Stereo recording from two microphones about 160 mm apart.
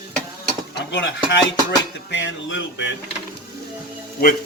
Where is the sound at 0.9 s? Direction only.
90° left.